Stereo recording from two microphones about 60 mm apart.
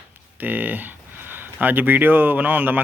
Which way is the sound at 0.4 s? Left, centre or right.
Right.